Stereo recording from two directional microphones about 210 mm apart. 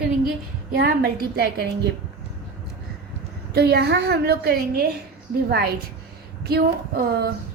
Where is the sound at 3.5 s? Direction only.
50° right (ahead or behind).